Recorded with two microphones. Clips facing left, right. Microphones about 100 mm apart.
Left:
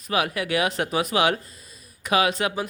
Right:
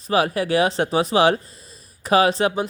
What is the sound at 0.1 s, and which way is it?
Speech, 35° right (ahead or behind).